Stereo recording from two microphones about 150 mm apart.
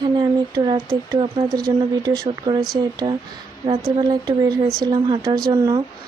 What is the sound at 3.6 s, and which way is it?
Speech, 20° right (ahead or behind).